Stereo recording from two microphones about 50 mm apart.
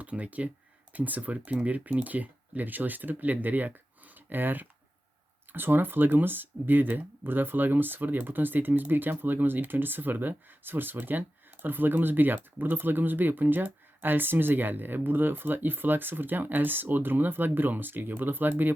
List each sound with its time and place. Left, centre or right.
0.0 s speech: right